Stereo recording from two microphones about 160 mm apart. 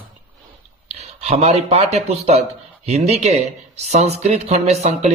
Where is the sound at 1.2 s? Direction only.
40° right (ahead or behind).